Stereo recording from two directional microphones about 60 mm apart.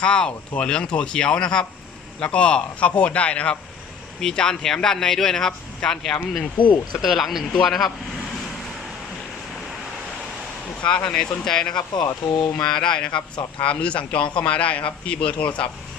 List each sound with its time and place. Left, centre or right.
0.0 s a man's voice: centre
6.9 s speech: centre
10.8 s a man's voice: centre